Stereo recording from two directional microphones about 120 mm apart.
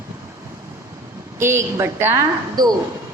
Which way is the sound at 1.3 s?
20° right (ahead or behind).